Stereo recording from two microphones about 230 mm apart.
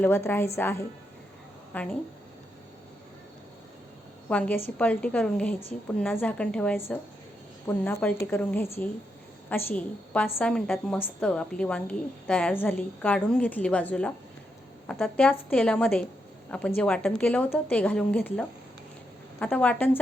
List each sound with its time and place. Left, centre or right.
0.0 s a woman's voice: centre
4.3 s a woman's voice: centre